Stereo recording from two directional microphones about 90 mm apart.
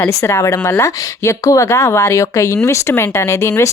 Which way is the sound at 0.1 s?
35° left (ahead or behind).